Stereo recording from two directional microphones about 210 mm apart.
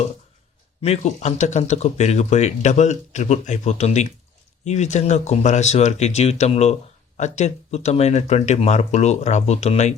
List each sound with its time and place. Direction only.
0.8 s speech: 30° left (ahead or behind)